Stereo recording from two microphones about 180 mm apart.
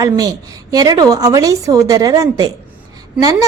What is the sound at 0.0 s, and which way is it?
A woman's voice, 20° right (ahead or behind).